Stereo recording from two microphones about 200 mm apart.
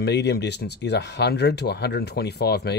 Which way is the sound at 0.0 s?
55° left (ahead or behind).